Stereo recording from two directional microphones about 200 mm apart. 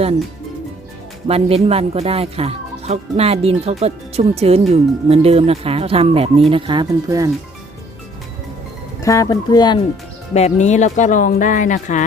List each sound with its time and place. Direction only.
1.3 s speech: 30° right (ahead or behind)
9.0 s speech: 15° left (ahead or behind)
10.3 s speech: 35° left (ahead or behind)